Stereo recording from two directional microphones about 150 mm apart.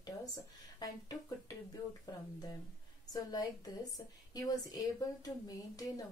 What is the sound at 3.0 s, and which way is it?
Speech, 25° left (ahead or behind).